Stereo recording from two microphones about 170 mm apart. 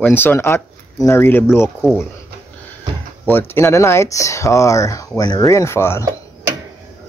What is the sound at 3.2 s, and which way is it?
Speech, 15° left (ahead or behind).